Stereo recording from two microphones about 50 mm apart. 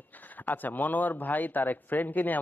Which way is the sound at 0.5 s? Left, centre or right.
Left.